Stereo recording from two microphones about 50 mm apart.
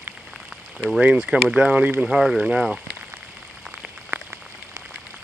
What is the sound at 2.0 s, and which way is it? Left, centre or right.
Speech, centre.